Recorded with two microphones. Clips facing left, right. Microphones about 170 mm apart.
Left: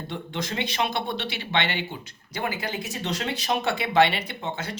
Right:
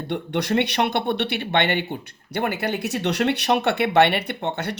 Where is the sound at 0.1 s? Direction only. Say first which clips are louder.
Right 10 dB; 65° right (ahead or behind).